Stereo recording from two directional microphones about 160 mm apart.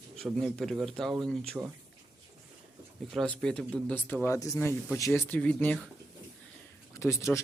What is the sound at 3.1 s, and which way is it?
Speech, 5° left (ahead or behind).